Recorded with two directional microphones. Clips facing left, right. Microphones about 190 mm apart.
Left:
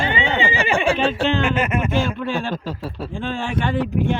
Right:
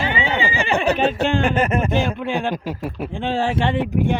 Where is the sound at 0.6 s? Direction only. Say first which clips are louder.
Even; 10° left (ahead or behind).